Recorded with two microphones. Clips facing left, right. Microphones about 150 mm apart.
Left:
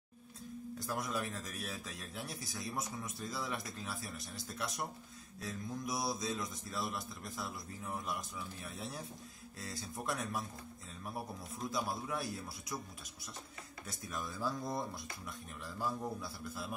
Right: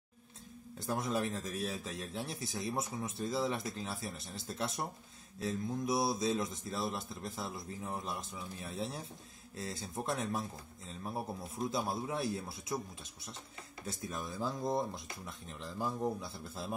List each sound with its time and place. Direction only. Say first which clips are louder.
0.7 s speech: right 5 dB; 25° right (ahead or behind)